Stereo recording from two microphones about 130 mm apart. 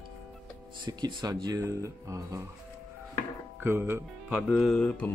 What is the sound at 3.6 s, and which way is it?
Speech, 15° right (ahead or behind).